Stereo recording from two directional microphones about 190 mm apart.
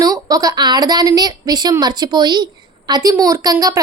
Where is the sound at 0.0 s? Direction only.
20° right (ahead or behind).